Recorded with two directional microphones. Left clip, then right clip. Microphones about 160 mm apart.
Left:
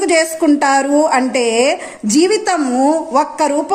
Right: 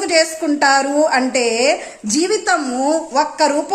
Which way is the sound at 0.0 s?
25° left (ahead or behind).